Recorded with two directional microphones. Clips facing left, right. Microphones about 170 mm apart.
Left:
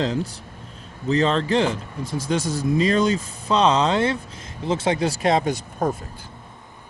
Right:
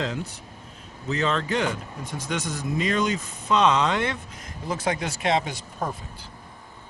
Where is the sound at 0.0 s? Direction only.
35° left (ahead or behind); by 6.3 s 50° left (ahead or behind).